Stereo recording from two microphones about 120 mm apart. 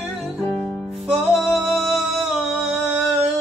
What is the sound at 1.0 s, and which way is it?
Music, centre (ahead or behind).